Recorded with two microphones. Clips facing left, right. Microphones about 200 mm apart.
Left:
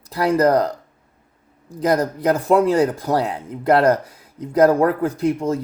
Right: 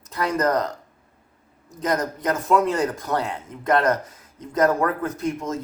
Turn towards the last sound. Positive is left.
turn(degrees=35)  # may be behind; listen again after turning